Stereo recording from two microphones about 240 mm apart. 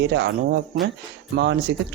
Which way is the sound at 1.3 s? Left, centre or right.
Right.